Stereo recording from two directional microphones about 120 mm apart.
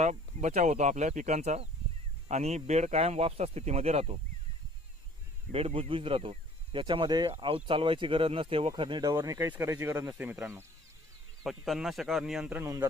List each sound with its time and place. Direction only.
0.0 s speech: 75° right (ahead or behind)
5.5 s speech: 55° right (ahead or behind)
8.7 s speech: 40° right (ahead or behind)
9.1 s speech: 25° right (ahead or behind)
11.4 s speech: centre (ahead or behind)